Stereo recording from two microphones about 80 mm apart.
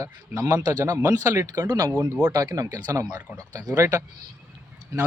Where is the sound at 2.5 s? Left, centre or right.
Right.